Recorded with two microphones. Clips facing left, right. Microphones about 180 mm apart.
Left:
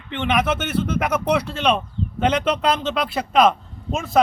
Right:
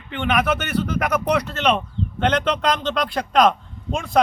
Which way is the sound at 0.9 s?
5° left (ahead or behind).